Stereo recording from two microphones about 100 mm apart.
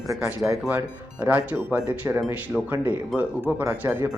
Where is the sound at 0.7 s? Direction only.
15° right (ahead or behind).